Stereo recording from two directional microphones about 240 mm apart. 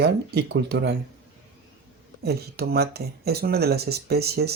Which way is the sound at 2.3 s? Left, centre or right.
Right.